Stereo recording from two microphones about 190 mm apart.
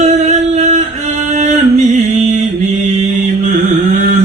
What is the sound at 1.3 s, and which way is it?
Music, 40° right (ahead or behind).